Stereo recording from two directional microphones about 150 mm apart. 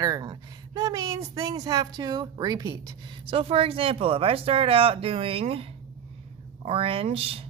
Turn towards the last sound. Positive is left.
turn(degrees=-40)  # may be behind; listen again after turning